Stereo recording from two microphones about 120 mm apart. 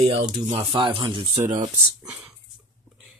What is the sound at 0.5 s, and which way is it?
Speech, 45° right (ahead or behind).